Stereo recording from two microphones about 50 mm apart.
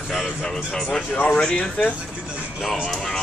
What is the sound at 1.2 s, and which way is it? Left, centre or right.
Speech, centre.